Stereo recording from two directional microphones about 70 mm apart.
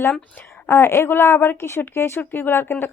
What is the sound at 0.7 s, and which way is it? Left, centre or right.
A woman's voice, left.